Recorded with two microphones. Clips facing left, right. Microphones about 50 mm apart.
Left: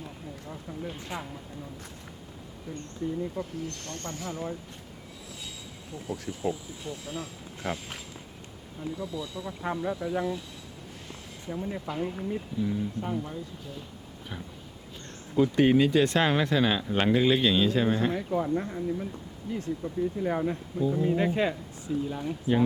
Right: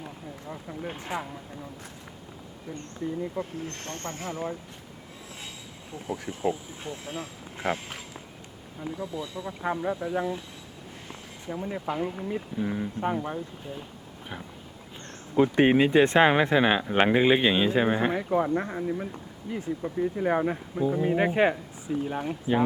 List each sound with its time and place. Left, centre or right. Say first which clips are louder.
0.0 s run: right 1 dB; right
1.1 s speech: right 5 dB; right
3.6 s speech: right 1 dB; right
6.1 s speech: right 3 dB; right
9.1 s speech: right 1 dB; right
12.3 s speech: even; right
15.4 s speech: right 1 dB; right
19.5 s speech: even; centre
19.8 s speech: right 4 dB; right